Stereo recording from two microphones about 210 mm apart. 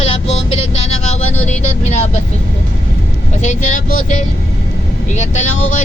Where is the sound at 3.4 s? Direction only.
35° left (ahead or behind).